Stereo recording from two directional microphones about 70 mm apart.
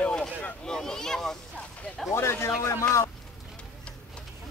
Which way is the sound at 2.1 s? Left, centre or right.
Left.